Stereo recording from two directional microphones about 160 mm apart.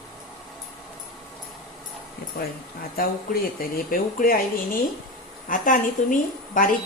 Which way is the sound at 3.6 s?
60° left (ahead or behind).